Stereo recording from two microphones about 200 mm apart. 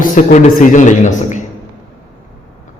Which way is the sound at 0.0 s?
35° left (ahead or behind).